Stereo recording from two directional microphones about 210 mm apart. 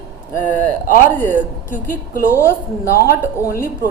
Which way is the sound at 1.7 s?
40° left (ahead or behind).